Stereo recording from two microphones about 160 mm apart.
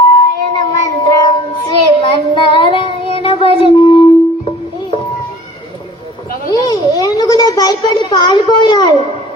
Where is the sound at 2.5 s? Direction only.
30° left (ahead or behind).